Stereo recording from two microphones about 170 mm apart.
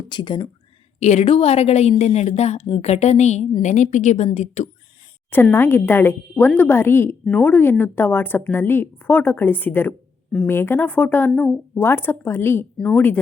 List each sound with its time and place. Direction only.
0.1 s speech: 25° left (ahead or behind)
0.9 s a woman's voice: 40° left (ahead or behind)
5.3 s speech: 15° left (ahead or behind)